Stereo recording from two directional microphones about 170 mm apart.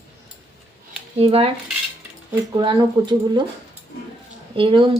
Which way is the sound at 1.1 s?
35° right (ahead or behind).